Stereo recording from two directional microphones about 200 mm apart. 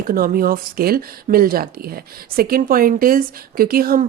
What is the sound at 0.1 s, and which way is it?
Speech, 45° right (ahead or behind).